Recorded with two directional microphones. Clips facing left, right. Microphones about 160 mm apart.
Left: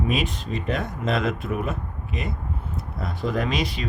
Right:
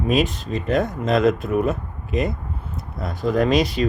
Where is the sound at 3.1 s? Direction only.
40° right (ahead or behind).